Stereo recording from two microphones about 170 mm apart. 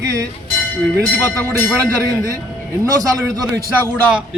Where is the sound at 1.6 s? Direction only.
15° right (ahead or behind).